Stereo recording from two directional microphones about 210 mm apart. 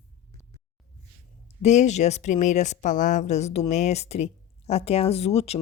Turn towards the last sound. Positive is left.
turn(degrees=30)  # may be behind; listen again after turning